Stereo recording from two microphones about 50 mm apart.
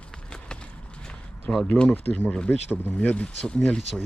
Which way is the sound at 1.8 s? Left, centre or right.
Left.